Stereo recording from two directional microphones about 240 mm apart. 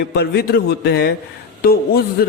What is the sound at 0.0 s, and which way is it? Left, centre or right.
A man's voice, left.